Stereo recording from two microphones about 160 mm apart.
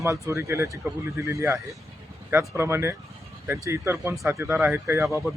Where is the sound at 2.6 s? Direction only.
15° right (ahead or behind).